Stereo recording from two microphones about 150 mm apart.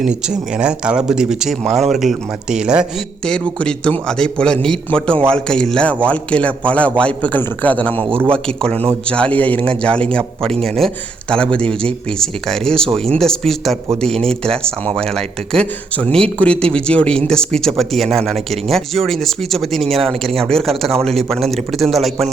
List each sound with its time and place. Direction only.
0.0 s speech: 5° right (ahead or behind)
3.6 s a man's voice: 5° left (ahead or behind)
7.9 s a man's voice: 35° right (ahead or behind)
8.3 s a man's voice: 5° left (ahead or behind)